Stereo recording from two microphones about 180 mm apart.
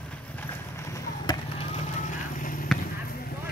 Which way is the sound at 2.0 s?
45° left (ahead or behind).